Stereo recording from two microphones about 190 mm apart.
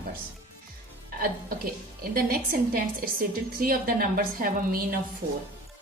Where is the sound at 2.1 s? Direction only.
50° right (ahead or behind).